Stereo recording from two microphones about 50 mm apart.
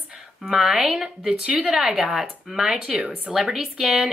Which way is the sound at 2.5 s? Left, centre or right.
Centre.